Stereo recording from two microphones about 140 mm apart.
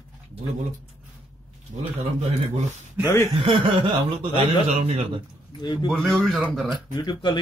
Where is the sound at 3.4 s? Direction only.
35° right (ahead or behind).